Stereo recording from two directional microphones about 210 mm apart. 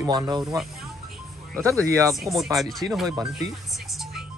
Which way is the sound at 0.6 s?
Centre (ahead or behind).